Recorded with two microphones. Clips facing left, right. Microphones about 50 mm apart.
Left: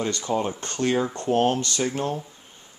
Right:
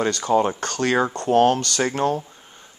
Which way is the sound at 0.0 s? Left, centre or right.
Right.